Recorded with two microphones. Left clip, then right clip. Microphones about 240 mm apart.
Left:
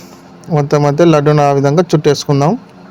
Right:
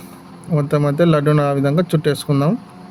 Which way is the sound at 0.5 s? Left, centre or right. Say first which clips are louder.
Left 6 dB; centre.